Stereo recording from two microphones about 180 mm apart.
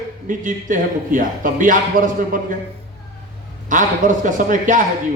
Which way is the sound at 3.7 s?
45° right (ahead or behind).